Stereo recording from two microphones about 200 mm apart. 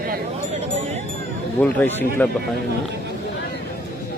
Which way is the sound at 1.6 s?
10° left (ahead or behind).